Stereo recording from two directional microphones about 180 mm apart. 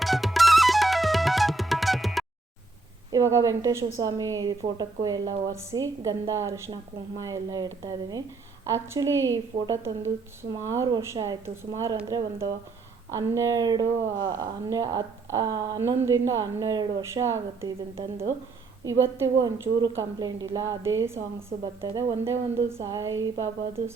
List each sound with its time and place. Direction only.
0.0 s music: centre (ahead or behind)
3.1 s a woman's voice: 15° right (ahead or behind)
13.1 s a woman's voice: 20° right (ahead or behind)
17.9 s a woman's voice: 30° right (ahead or behind)
18.9 s a woman's voice: 15° right (ahead or behind)
21.6 s a woman's voice: 30° right (ahead or behind)
22.3 s a woman's voice: 15° right (ahead or behind)